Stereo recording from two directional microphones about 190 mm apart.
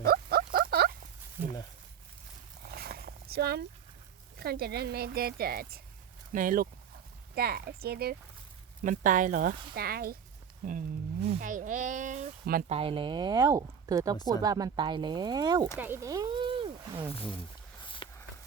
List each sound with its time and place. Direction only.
0.0 s rodents: 55° right (ahead or behind)
2.6 s a sound: 55° right (ahead or behind)
4.4 s a woman's voice: 55° right (ahead or behind)
8.8 s speech: 45° right (ahead or behind)
11.3 s speech: 45° right (ahead or behind)
12.6 s speech: 30° right (ahead or behind)
14.2 s speech: 20° left (ahead or behind)
14.4 s speech: 20° right (ahead or behind)
15.8 s a sound: 15° right (ahead or behind)
17.8 s walk: 25° left (ahead or behind)